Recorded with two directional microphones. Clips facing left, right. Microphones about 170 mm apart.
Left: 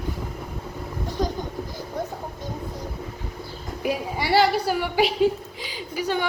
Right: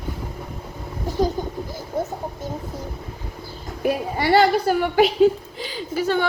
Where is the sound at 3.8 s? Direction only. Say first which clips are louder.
Right 4 dB; 45° right (ahead or behind).